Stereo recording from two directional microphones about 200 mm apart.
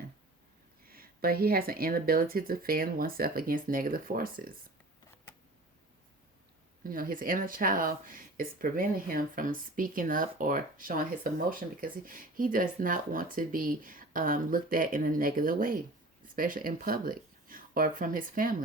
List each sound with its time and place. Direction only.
0.9 s speech: 45° right (ahead or behind)
6.8 s speech: 45° right (ahead or behind)